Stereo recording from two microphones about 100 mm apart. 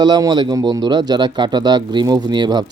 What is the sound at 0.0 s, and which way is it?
Speech, 45° right (ahead or behind).